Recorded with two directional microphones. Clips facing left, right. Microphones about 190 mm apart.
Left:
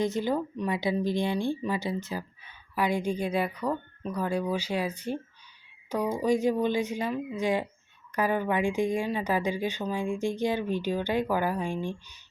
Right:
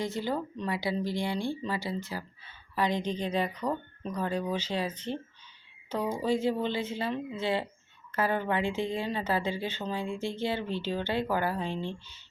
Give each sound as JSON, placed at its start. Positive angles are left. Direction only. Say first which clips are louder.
{"t": 0.0, "sound": "speech", "louder": "left 4 dB", "side_deg": 20}